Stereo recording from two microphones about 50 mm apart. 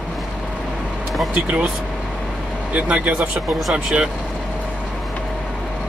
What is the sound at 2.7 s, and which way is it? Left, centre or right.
Speech, right.